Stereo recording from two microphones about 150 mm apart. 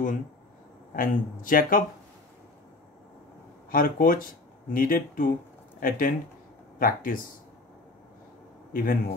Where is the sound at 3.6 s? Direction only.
70° left (ahead or behind).